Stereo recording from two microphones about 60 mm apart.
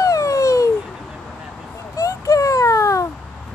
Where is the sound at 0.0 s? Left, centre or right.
Left.